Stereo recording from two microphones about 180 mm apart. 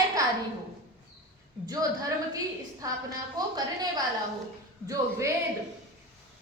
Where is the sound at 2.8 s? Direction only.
20° right (ahead or behind).